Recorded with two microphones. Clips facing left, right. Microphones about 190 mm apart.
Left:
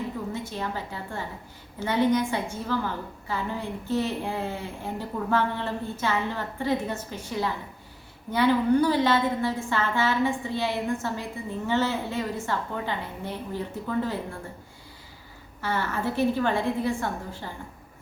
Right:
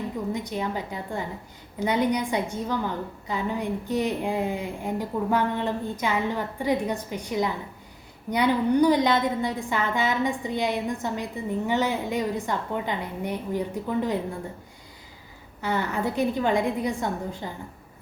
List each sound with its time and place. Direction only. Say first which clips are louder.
0.3 s a woman's voice: right 3 dB; 15° right (ahead or behind)
15.6 s a woman's voice: right 2 dB; 15° right (ahead or behind)